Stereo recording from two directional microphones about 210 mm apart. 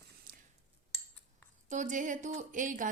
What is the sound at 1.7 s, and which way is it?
A woman's voice, 35° right (ahead or behind).